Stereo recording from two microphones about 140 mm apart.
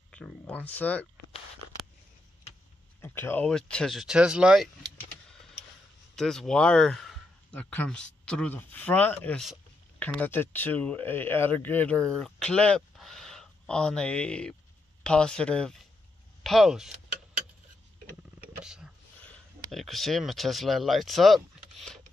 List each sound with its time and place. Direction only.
0.1 s a sound: 10° left (ahead or behind)
0.5 s speech: 10° left (ahead or behind)
3.0 s speech: 15° left (ahead or behind); by 4.6 s 5° right (ahead or behind)
6.1 s speech: 5° left (ahead or behind)
18.6 s a sound: 5° right (ahead or behind)
19.7 s speech: centre (ahead or behind)